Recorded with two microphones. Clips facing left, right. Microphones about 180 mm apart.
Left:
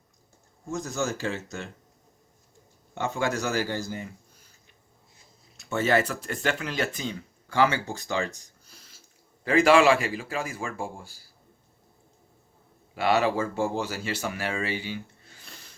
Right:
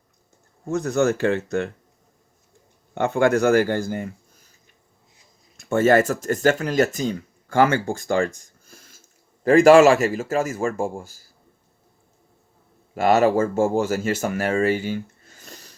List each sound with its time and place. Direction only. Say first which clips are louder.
0.6 s a man's voice: right 9 dB; 65° right (ahead or behind)
2.9 s a man's voice: right 9 dB; 60° right (ahead or behind)
5.5 s speech: right 7 dB; 50° right (ahead or behind)
12.9 s speech: right 6 dB; 45° right (ahead or behind)